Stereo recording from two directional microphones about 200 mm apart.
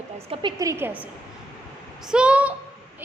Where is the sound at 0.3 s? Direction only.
20° right (ahead or behind).